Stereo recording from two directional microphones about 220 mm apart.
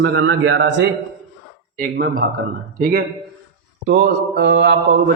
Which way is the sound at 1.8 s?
40° right (ahead or behind).